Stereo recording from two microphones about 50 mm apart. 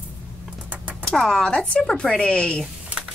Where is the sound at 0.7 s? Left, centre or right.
Right.